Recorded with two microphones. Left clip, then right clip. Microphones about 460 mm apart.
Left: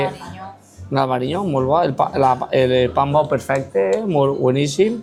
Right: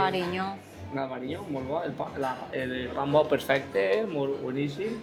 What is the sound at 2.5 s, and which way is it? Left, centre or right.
Speech, left.